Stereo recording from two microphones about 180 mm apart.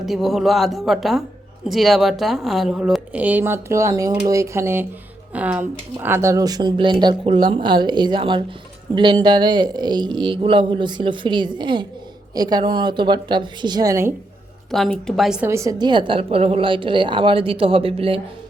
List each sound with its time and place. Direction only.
0.0 s a woman's voice: centre (ahead or behind); by 14.1 s 15° right (ahead or behind)
14.7 s speech: centre (ahead or behind)
15.4 s speech: 15° right (ahead or behind); by 18.2 s 30° right (ahead or behind)